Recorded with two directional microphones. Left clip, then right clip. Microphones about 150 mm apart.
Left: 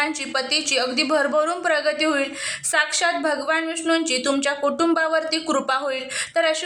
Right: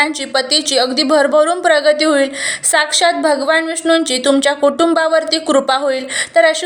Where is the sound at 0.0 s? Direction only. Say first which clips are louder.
Right 8 dB; 30° right (ahead or behind).